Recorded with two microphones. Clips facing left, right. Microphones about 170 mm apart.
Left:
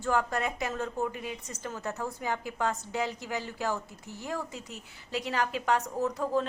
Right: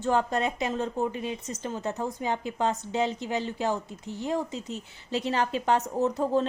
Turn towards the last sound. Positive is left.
turn(degrees=-25)  # may be behind; listen again after turning